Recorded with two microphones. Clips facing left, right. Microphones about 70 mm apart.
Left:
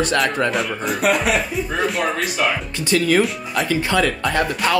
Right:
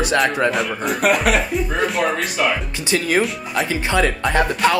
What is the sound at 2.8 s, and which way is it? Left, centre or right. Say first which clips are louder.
Speech: left 3 dB; centre.